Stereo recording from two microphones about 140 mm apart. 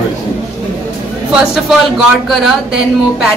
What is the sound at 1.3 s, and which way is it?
Speech, centre (ahead or behind).